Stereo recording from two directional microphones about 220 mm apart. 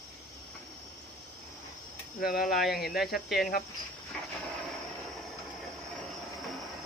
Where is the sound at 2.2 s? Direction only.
40° left (ahead or behind).